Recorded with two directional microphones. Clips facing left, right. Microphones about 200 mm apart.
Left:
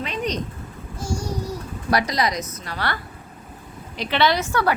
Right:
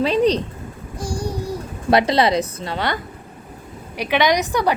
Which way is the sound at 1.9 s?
25° right (ahead or behind).